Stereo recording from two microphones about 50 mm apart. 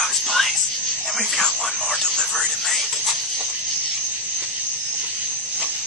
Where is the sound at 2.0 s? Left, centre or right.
Centre.